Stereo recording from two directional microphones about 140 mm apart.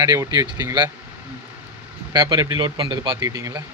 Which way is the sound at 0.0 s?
25° right (ahead or behind).